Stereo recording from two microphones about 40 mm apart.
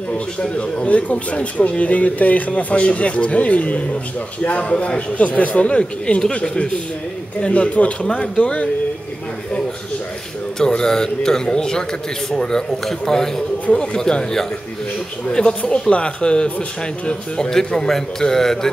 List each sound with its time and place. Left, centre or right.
0.1 s speech: left
7.4 s a man's voice: left
10.7 s a man's voice: centre
15.3 s a man's voice: left